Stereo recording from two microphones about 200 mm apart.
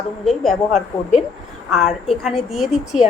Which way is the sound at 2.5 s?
Centre (ahead or behind).